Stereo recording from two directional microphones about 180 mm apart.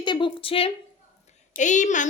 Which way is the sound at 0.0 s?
25° left (ahead or behind).